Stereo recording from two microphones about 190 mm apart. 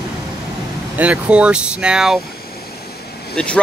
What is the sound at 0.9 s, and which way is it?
Speech, 5° right (ahead or behind).